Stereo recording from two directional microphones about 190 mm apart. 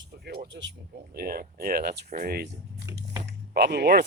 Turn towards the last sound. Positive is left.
turn(degrees=-55)  # may be behind; listen again after turning